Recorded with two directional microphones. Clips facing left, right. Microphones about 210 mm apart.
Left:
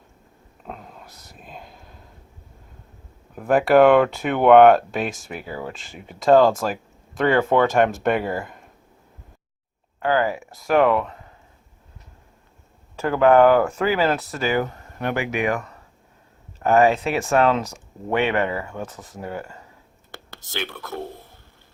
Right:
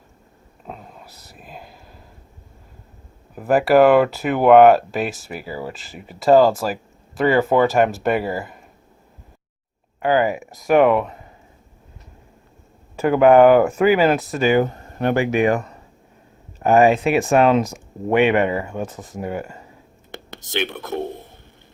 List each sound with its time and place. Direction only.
0.6 s a sound: centre (ahead or behind)
3.3 s speech: 5° right (ahead or behind)
10.0 s speech: 15° right (ahead or behind)
13.0 s speech: 15° right (ahead or behind)
16.6 s speech: 15° right (ahead or behind)
19.3 s speech: 15° right (ahead or behind)
20.1 s whispering: 20° right (ahead or behind)